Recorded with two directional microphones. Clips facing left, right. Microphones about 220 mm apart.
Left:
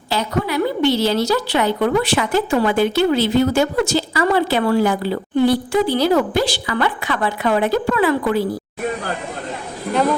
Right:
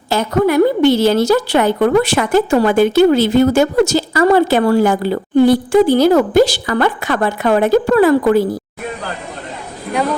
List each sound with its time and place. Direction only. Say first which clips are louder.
0.1 s a woman's voice: right 7 dB; 50° right (ahead or behind)